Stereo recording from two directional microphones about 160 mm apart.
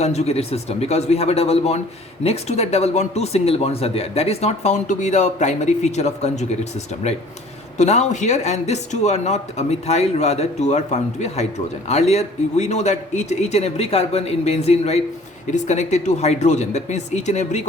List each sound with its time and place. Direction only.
0.0 s a man's voice: 45° left (ahead or behind)
7.8 s speech: 45° left (ahead or behind)